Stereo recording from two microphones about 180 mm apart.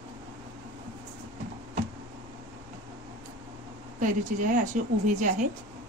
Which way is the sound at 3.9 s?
45° right (ahead or behind).